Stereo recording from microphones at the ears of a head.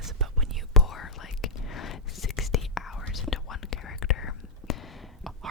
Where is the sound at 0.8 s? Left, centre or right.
Left.